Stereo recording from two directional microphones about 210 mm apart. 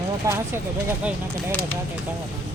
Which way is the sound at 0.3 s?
10° right (ahead or behind).